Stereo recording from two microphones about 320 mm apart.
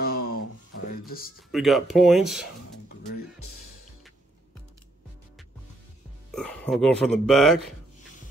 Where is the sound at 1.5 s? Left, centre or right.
Centre.